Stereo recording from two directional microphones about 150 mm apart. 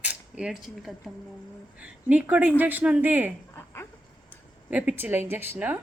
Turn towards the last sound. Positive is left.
turn(degrees=-10)  # may be behind; listen again after turning